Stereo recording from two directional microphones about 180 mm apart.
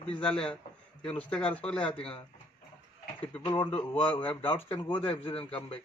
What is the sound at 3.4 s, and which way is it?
Speech, 25° left (ahead or behind).